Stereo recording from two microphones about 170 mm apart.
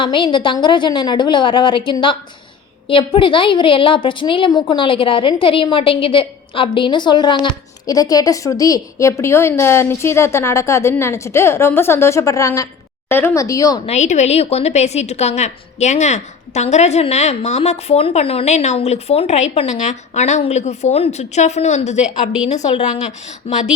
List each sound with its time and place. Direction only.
0.0 s a woman's voice: 30° left (ahead or behind)
13.8 s a woman's voice: 40° left (ahead or behind)